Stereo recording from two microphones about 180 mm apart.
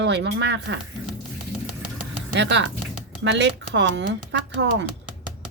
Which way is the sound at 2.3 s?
80° right.